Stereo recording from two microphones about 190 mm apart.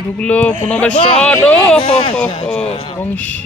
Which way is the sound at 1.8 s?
30° left (ahead or behind).